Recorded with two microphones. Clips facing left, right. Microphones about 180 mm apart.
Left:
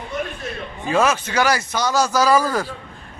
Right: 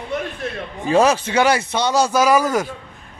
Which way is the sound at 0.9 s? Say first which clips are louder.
Right 4 dB; 35° right (ahead or behind).